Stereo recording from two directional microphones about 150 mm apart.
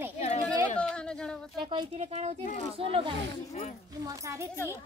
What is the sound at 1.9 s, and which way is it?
Speech, 45° right (ahead or behind).